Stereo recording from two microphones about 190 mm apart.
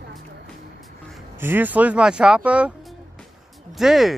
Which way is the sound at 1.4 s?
10° right (ahead or behind).